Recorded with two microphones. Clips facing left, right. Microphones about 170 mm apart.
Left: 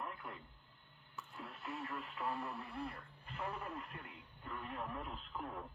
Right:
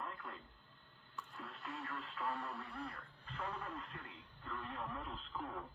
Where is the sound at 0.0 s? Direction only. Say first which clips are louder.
Left 1 dB; 20° left (ahead or behind).